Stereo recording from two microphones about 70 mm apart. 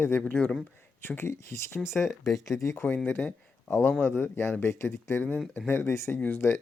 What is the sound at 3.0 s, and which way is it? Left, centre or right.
Speech, left.